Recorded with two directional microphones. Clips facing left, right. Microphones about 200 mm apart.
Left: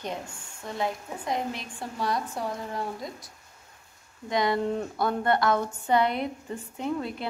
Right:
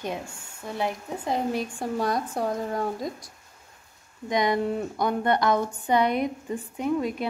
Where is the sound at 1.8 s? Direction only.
45° right (ahead or behind).